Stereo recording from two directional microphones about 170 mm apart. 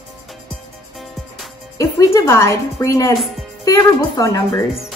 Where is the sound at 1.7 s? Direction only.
20° left (ahead or behind).